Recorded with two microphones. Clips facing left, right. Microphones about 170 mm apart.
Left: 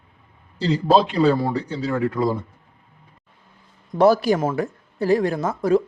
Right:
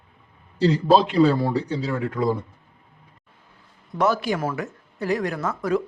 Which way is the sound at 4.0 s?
35° left (ahead or behind).